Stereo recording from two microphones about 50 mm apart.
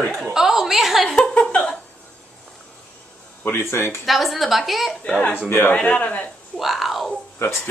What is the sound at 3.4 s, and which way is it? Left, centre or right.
Speech, left.